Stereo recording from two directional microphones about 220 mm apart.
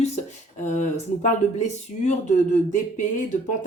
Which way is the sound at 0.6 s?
35° left (ahead or behind).